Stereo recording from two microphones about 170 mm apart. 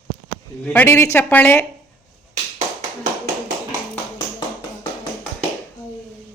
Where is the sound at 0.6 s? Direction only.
10° left (ahead or behind).